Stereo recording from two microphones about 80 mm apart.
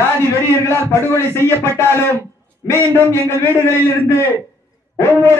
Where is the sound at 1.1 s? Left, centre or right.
Left.